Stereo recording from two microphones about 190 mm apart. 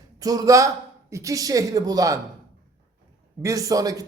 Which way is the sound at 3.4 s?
15° right (ahead or behind).